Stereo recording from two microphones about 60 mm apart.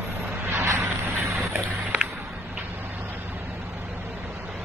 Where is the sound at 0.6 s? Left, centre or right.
Right.